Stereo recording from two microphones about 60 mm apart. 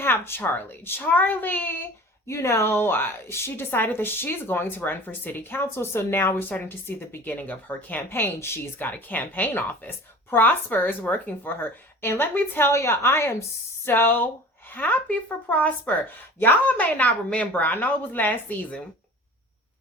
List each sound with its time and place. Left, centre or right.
0.0 s a woman's voice: left
2.2 s a woman's voice: left
8.4 s speech: left
8.8 s a woman's voice: left